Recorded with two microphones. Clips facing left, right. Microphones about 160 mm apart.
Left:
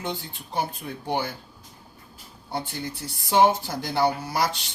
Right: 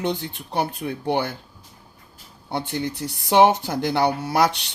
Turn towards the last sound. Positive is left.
turn(degrees=-65)  # may be behind; listen again after turning